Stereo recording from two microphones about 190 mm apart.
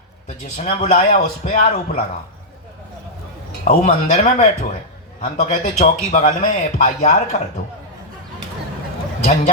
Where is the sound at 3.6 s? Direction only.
45° left (ahead or behind).